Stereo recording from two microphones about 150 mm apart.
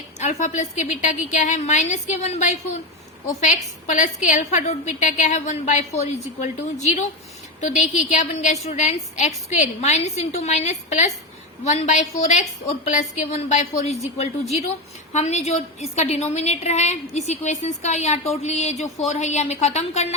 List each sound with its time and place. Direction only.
0.2 s a woman's voice: 50° left (ahead or behind)